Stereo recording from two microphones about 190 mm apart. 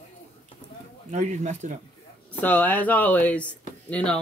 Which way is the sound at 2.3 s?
10° left (ahead or behind).